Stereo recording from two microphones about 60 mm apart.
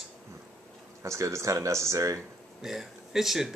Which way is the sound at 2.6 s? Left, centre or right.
Centre.